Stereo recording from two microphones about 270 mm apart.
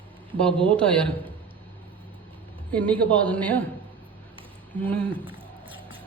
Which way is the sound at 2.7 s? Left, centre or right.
Centre.